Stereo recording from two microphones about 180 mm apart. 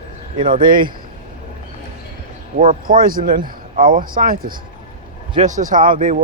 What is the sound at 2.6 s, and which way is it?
Speech, 50° right (ahead or behind).